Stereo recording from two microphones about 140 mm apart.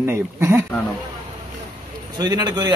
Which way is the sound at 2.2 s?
30° right (ahead or behind).